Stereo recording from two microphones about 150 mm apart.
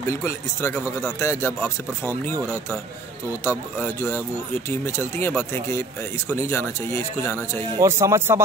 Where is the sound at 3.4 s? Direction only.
15° left (ahead or behind).